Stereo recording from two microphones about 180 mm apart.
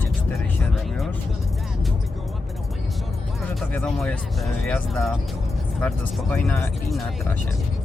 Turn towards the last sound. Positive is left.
turn(degrees=0)  # may be behind; listen again after turning